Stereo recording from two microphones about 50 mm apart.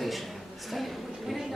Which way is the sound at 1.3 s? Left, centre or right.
Centre.